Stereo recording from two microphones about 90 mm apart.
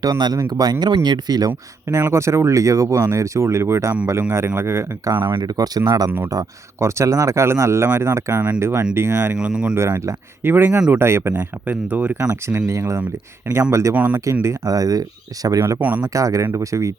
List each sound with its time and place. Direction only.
0.0 s speech: 45° right (ahead or behind)
1.5 s speech: 30° right (ahead or behind)
5.4 s speech: 45° right (ahead or behind)
6.3 s speech: 35° right (ahead or behind)
9.3 s speech: 10° right (ahead or behind)
9.7 s speech: 30° right (ahead or behind)
13.9 s speech: 20° right (ahead or behind)
14.4 s speech: 40° right (ahead or behind)